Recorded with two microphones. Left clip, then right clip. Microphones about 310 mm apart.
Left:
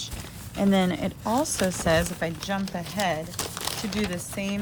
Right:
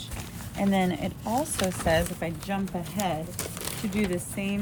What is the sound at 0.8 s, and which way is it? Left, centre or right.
Speech, centre.